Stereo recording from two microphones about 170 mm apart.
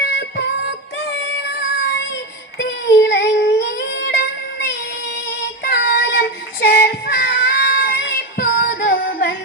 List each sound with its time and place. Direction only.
0.2 s music: 85° left
1.5 s child singing: 90° left; by 4.3 s 70° left (ahead or behind)
5.0 s female singing: 75° left (ahead or behind)